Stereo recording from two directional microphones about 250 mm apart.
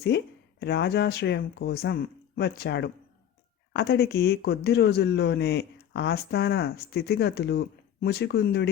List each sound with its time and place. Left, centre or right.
0.1 s speech: left